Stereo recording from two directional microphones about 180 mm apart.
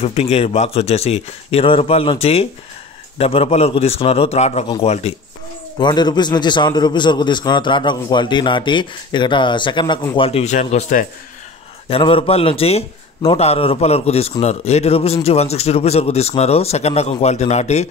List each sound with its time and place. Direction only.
0.0 s speech: 35° left (ahead or behind)
5.8 s a man's voice: 25° left (ahead or behind); by 11.1 s 45° left (ahead or behind)
11.9 s speech: 30° left (ahead or behind)